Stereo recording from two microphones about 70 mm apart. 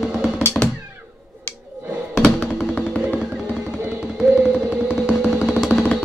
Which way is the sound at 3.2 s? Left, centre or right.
Centre.